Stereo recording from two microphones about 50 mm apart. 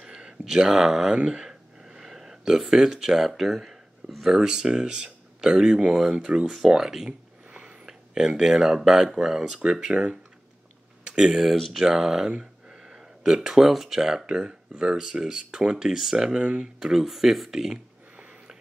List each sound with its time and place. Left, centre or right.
0.0 s a sound: centre
1.1 s speech: right
1.4 s speech: centre
7.1 s speech: right